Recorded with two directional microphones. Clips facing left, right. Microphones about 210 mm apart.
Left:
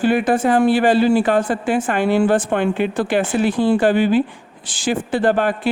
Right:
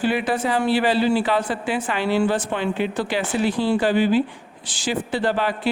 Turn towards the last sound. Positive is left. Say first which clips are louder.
# left 5 dB
turn(degrees=50)  # may be behind; listen again after turning